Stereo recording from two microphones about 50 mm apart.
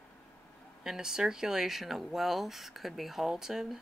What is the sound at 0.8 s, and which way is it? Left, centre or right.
Speech, centre.